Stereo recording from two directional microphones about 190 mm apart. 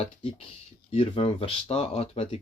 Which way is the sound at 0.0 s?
30° left (ahead or behind).